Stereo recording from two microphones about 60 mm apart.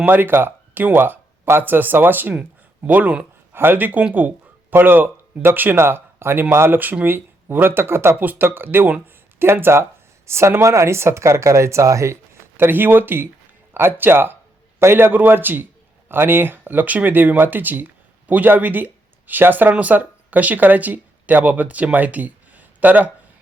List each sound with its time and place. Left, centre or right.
0.0 s speech: right
3.5 s speech: right
5.7 s speech: right
6.7 s speech: right
12.5 s speech: right